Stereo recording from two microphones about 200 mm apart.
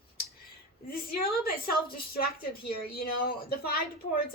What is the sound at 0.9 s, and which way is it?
A woman's voice, 50° left (ahead or behind).